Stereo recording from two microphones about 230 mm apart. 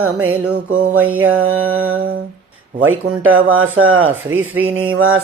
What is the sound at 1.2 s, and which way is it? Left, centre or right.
Speech, right.